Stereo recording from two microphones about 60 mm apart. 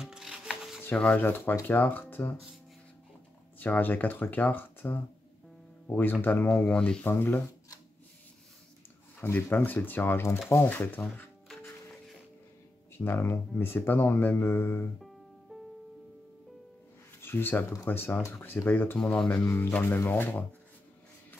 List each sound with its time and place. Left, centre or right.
0.0 s rub: centre
0.9 s speech: left
1.2 s speech: left
3.5 s speech: left
6.6 s speech: centre
7.1 s speech: left
9.2 s speech: left
12.9 s speech: left
15.5 s music: centre
17.2 s speech: left
19.4 s speech: left
19.7 s speech: left